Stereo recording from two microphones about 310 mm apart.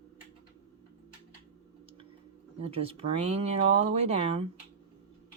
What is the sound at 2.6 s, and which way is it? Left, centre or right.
Speech, centre.